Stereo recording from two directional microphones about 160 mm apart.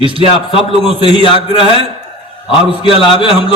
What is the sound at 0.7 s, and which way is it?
Speech, 35° right (ahead or behind).